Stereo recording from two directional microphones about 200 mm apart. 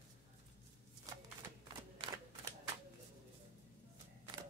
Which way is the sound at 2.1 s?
25° right (ahead or behind).